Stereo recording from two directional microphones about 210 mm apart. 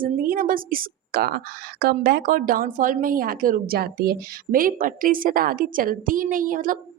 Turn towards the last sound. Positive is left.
turn(degrees=-40)  # may be behind; listen again after turning